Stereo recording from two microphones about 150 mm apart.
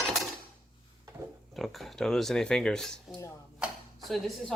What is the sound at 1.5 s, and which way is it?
Speech, centre (ahead or behind).